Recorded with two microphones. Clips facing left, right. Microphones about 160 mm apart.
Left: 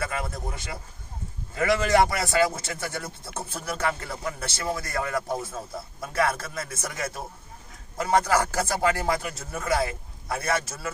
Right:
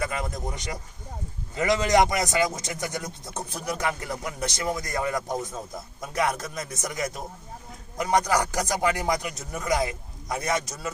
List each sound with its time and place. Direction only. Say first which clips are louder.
0.0 s a man's voice: right 1 dB; 15° right (ahead or behind)